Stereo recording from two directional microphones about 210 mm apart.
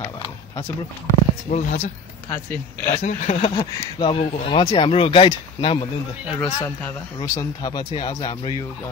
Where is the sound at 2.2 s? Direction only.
10° left (ahead or behind).